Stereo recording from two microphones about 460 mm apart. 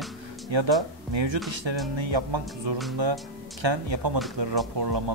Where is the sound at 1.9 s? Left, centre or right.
Right.